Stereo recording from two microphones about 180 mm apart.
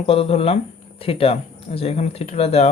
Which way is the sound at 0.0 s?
35° left (ahead or behind).